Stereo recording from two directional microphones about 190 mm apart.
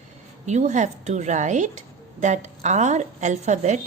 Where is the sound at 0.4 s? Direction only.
35° right (ahead or behind).